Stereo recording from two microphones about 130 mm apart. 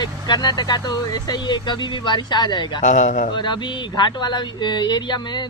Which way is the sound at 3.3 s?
35° left (ahead or behind).